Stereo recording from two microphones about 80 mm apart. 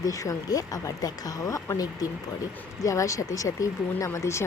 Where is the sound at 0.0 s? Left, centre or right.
Left.